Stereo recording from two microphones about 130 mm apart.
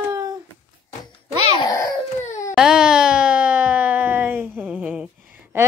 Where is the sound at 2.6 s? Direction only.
5° right (ahead or behind).